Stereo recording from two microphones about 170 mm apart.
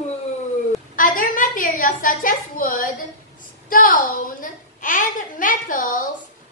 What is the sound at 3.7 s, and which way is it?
A child's voice, 55° left (ahead or behind).